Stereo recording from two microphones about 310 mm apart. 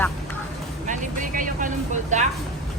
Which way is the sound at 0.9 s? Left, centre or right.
Right.